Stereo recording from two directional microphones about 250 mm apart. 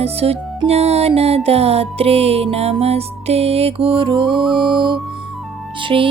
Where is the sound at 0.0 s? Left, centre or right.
Right.